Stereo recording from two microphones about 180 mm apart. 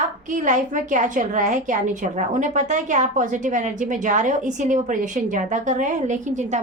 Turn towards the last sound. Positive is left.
turn(degrees=-40)  # may be behind; listen again after turning